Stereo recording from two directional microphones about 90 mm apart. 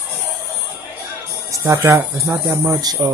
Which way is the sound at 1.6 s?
30° right (ahead or behind).